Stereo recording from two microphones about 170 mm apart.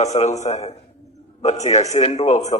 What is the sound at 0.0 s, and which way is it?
A man's voice, 40° left (ahead or behind).